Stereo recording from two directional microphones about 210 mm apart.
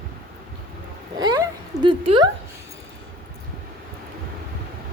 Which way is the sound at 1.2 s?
20° right (ahead or behind).